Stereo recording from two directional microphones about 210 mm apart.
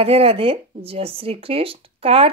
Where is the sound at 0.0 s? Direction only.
25° right (ahead or behind).